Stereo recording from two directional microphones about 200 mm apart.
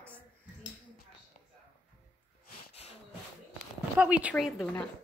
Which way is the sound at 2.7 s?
30° left (ahead or behind).